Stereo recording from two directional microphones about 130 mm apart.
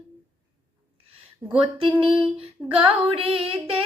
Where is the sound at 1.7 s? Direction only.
45° right (ahead or behind).